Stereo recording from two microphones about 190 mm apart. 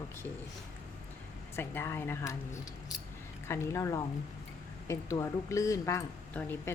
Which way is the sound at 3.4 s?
15° left (ahead or behind).